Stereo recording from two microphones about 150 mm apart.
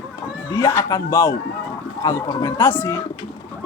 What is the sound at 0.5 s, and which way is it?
Speech, 20° left (ahead or behind).